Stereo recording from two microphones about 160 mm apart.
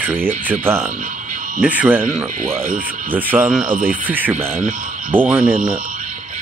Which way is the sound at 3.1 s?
10° right (ahead or behind).